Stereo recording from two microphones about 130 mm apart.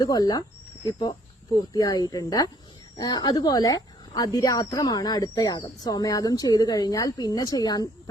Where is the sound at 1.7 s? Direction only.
25° left (ahead or behind).